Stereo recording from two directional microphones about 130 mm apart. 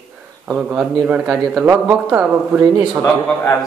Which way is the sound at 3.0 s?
15° left (ahead or behind).